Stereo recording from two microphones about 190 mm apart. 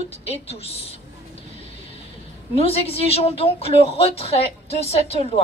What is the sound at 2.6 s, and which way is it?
A woman's voice, 30° left (ahead or behind).